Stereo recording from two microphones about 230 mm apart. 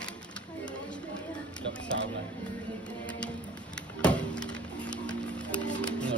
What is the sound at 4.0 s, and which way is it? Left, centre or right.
Music, centre.